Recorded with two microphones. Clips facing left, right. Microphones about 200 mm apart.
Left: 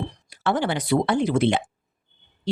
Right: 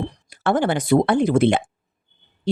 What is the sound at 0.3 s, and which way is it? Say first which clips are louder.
Speech: right 4 dB; 50° right (ahead or behind).